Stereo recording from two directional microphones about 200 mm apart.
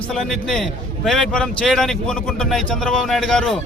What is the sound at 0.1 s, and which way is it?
A man's voice, 5° left (ahead or behind).